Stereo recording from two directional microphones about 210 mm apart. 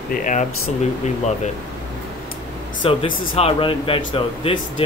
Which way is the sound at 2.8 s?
25° left (ahead or behind).